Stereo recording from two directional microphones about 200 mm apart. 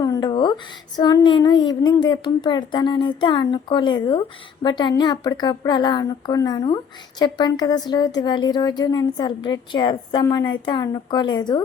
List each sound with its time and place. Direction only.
0.0 s speech: 20° left (ahead or behind)